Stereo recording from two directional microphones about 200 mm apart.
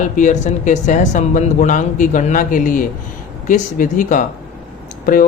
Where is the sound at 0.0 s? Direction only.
40° left (ahead or behind).